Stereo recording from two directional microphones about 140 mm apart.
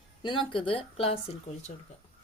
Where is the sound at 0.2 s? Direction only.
35° left (ahead or behind).